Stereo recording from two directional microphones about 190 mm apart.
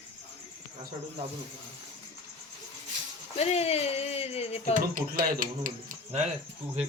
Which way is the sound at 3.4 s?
35° left (ahead or behind).